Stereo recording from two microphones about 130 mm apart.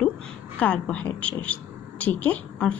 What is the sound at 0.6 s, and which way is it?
A woman's voice, 10° left (ahead or behind).